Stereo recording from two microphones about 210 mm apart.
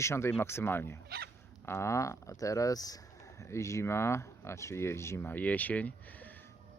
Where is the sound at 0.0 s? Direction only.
10° left (ahead or behind).